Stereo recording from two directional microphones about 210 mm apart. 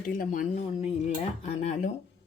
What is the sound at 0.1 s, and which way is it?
Speech, 40° left (ahead or behind).